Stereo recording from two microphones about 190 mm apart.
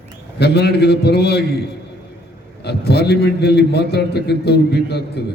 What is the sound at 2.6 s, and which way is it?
A man's voice, 60° left (ahead or behind).